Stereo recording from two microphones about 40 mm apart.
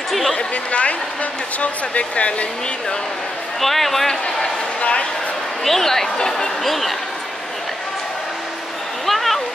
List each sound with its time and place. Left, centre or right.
0.3 s speech: left
3.6 s a man's voice: centre
4.4 s speech: left
5.6 s speech: centre
6.6 s a man's voice: centre
9.0 s a sound: centre